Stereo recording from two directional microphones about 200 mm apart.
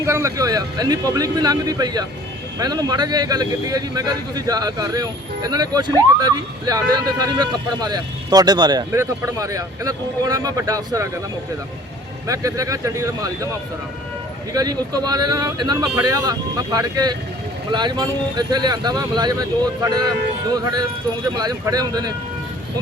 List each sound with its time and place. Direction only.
0.0 s a man's voice: 15° right (ahead or behind)
12.3 s speech: 15° right (ahead or behind)
14.5 s a man's voice: 20° right (ahead or behind)